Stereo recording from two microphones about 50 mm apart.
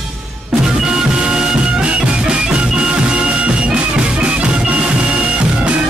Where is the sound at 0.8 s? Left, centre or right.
Centre.